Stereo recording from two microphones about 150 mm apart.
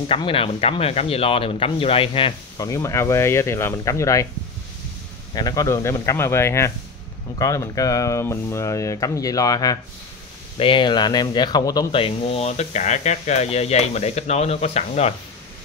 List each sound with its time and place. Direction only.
0.1 s speech: 35° left (ahead or behind)
2.6 s speech: 20° left (ahead or behind)
5.3 s speech: 25° left (ahead or behind)
11.9 s speech: 40° left (ahead or behind)